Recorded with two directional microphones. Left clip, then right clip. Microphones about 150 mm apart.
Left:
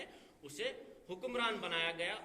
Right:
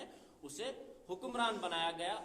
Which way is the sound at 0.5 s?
35° right (ahead or behind).